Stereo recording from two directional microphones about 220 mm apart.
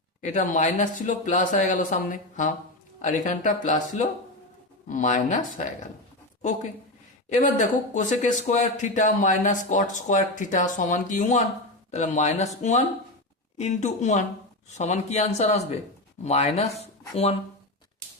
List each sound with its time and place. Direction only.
0.3 s speech: 35° left (ahead or behind)
7.3 s speech: 35° left (ahead or behind)